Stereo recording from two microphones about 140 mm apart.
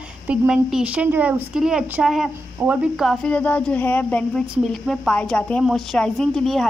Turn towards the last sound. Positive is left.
turn(degrees=5)  # may be behind; listen again after turning